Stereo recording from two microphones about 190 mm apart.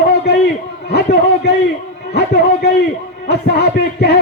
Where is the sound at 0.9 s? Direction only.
60° left (ahead or behind).